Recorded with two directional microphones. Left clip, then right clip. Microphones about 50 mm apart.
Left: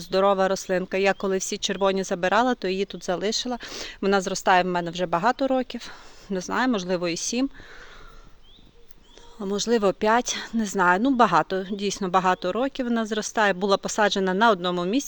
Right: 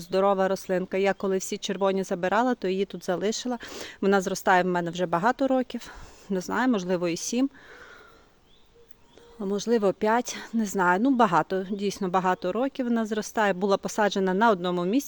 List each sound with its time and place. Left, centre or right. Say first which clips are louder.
0.0 s speech: left 2 dB; right
3.0 s speech: left 2 dB; right
9.4 s a woman's voice: left 2 dB; centre; by 15.0 s right